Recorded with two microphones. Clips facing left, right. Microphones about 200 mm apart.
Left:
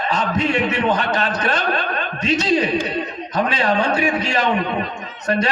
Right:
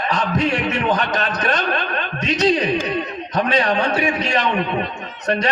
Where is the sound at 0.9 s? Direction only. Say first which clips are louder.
Left 1 dB; 30° left (ahead or behind).